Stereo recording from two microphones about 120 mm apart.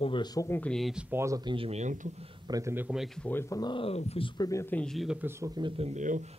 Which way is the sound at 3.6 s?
40° left (ahead or behind).